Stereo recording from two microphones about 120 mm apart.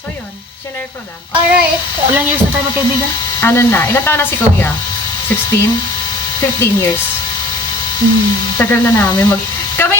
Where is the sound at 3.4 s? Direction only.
15° left (ahead or behind).